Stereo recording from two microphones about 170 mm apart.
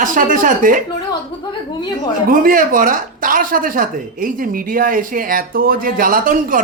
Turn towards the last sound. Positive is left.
turn(degrees=-55)  # may be behind; listen again after turning